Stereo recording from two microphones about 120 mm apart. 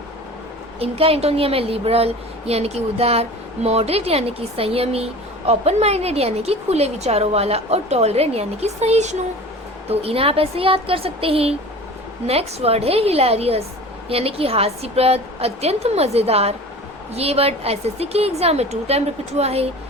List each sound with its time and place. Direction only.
0.8 s a woman's voice: 55° right (ahead or behind)
9.9 s a woman's voice: 55° right (ahead or behind)